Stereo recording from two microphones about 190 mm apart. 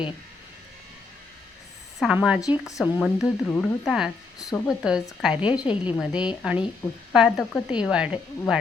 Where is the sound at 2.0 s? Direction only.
5° right (ahead or behind).